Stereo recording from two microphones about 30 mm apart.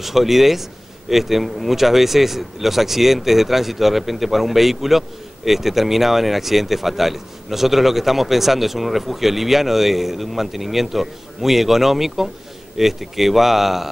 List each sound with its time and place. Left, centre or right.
0.0 s a man's voice: centre